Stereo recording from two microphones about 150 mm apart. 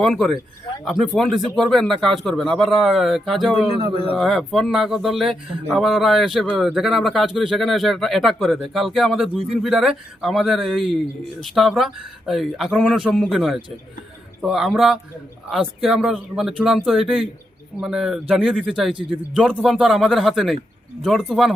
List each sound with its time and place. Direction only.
0.0 s speech: centre (ahead or behind)
3.8 s a man's voice: 40° right (ahead or behind)
4.2 s speech: centre (ahead or behind)